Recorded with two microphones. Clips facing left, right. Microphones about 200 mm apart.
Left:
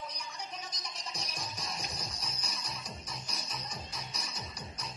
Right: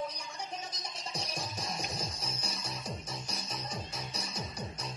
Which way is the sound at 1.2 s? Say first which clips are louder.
Right 4 dB; 25° right (ahead or behind).